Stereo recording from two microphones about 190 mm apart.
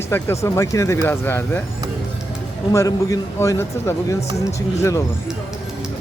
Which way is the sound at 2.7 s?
15° left (ahead or behind).